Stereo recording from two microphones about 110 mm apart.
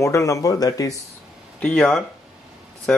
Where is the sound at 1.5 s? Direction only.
10° left (ahead or behind).